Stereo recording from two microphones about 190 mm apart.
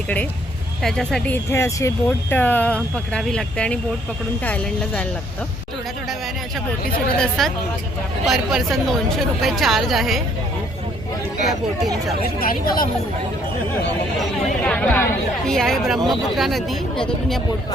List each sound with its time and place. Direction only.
0.8 s speech: centre (ahead or behind)
1.5 s speech: 15° left (ahead or behind)
7.2 s speech: centre (ahead or behind)
12.4 s a woman's voice: 50° left (ahead or behind)
14.6 s speech: 5° left (ahead or behind)